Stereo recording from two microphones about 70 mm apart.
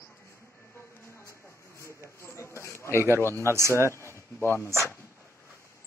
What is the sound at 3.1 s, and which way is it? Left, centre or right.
Speech, left.